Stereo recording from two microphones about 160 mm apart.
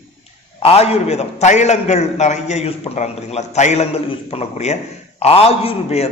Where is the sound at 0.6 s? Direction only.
40° left (ahead or behind).